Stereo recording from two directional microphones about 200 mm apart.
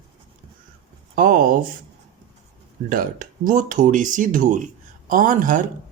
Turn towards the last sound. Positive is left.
turn(degrees=-40)  # may be behind; listen again after turning